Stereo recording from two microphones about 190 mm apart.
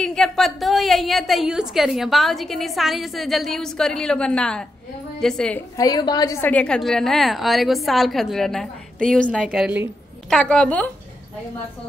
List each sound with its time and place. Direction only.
0.0 s a woman's voice: 5° left (ahead or behind)
5.8 s a woman's voice: 20° left (ahead or behind)
6.5 s a woman's voice: 5° left (ahead or behind)
9.4 s a woman's voice: 5° right (ahead or behind)
10.3 s a woman's voice: 5° left (ahead or behind)